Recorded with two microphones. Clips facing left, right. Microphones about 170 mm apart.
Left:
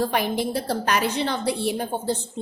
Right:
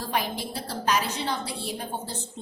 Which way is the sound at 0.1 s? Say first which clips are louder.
Left 6 dB; 60° left (ahead or behind).